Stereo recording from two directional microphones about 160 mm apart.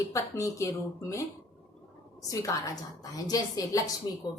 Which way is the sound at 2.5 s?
20° left (ahead or behind).